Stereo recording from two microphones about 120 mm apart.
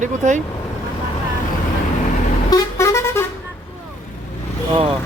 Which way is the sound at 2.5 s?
25° left (ahead or behind).